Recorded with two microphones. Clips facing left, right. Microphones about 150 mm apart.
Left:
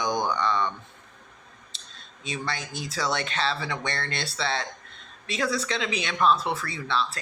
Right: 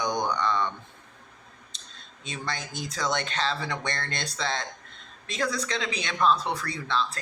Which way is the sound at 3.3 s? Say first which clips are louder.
Left 1 dB; 40° right (ahead or behind).